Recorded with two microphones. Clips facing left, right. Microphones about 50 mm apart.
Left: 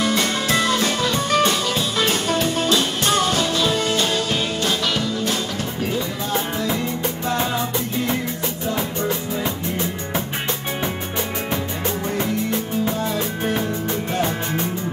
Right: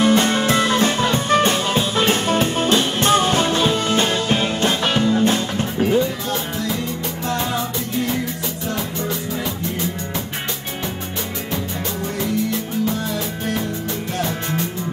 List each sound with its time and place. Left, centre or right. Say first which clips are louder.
0.0 s music: right 5 dB; right